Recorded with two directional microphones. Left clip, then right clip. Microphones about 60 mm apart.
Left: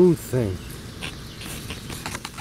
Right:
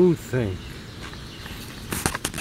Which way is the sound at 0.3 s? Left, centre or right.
Centre.